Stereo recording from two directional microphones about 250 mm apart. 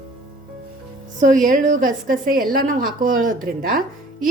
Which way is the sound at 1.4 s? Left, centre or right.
Right.